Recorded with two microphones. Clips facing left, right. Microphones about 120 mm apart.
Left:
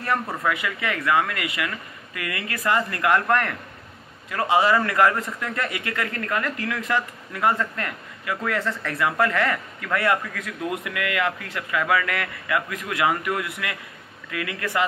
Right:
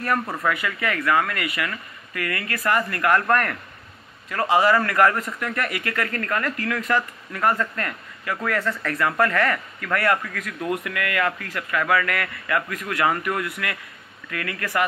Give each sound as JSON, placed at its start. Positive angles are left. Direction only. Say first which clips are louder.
{"t": 0.5, "sound": "a man's voice", "louder": "right 1 dB", "side_deg": 15}